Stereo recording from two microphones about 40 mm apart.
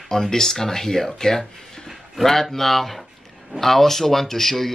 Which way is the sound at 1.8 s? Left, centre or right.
Centre.